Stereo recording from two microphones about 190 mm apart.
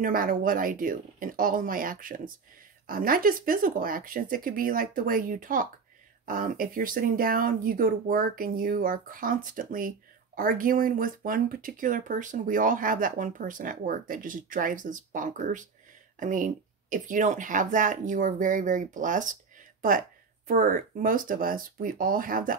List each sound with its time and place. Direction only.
0.0 s speech: 50° right (ahead or behind)